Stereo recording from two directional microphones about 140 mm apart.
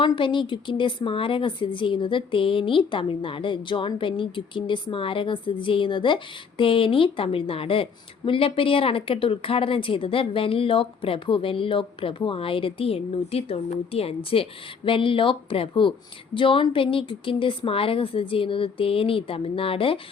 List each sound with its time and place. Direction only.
0.0 s a woman's voice: 35° left (ahead or behind)